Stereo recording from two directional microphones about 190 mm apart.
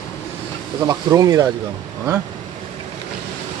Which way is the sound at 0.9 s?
15° right (ahead or behind).